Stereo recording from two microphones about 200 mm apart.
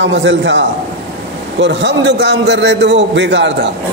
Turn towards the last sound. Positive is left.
turn(degrees=-60)  # may be behind; listen again after turning